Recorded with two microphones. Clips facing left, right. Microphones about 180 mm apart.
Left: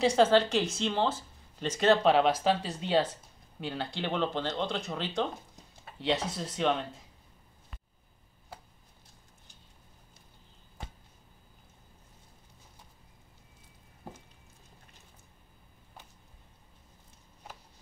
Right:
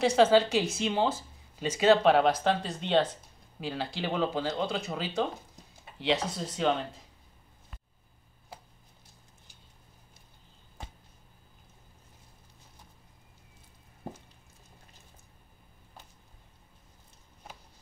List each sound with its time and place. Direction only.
0.0 s speech: 5° right (ahead or behind)